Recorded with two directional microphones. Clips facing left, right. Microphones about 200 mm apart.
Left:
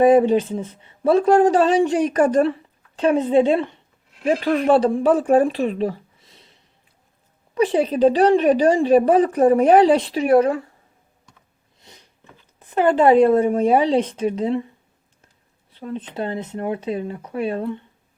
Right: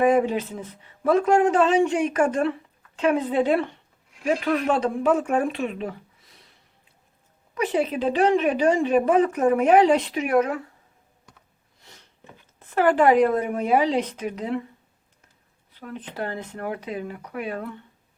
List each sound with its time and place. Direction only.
0.0 s a woman's voice: 30° left (ahead or behind)
7.5 s a woman's voice: 30° left (ahead or behind)
11.8 s a sound: 20° left (ahead or behind)
12.5 s speech: 20° left (ahead or behind)
15.7 s speech: 25° left (ahead or behind)